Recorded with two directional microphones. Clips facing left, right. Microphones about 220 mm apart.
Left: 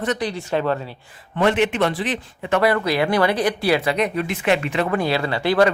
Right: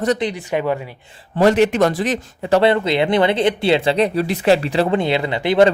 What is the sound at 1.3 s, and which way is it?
A man's voice, 35° right (ahead or behind).